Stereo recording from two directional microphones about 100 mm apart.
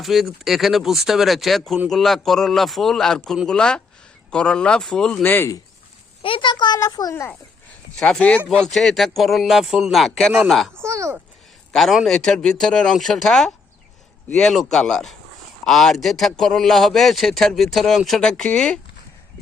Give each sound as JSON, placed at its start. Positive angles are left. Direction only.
{"t": 0.0, "sound": "a man's voice", "side_deg": 0}
{"t": 5.2, "sound": "speech", "side_deg": 20}
{"t": 6.2, "sound": "a child's voice", "side_deg": 55}
{"t": 6.7, "sound": "a child's voice", "side_deg": 40}
{"t": 7.9, "sound": "a man's voice", "side_deg": 10}
{"t": 10.8, "sound": "speech", "side_deg": -30}
{"t": 11.7, "sound": "a man's voice", "side_deg": 0}